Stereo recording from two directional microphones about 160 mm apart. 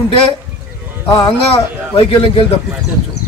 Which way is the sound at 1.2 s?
35° left (ahead or behind).